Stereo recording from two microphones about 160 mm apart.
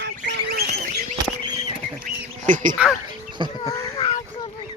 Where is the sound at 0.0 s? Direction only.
85° right.